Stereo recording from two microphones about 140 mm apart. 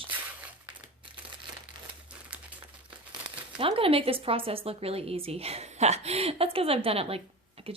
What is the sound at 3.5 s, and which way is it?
A woman's voice, 40° right (ahead or behind).